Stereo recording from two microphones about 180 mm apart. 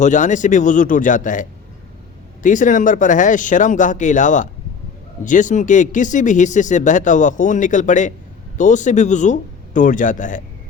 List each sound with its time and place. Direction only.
0.0 s speech: 45° left (ahead or behind)